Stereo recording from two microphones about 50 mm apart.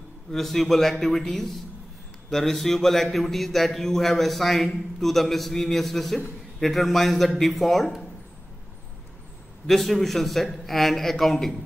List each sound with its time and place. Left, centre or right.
0.3 s a man's voice: centre
9.7 s a man's voice: centre